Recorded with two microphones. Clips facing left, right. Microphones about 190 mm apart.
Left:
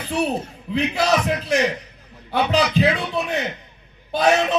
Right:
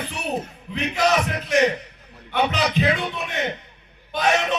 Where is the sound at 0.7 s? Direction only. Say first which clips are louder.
Left 2 dB; 35° left (ahead or behind).